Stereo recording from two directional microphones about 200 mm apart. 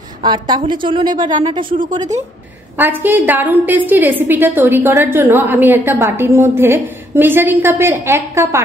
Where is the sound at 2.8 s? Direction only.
10° right (ahead or behind).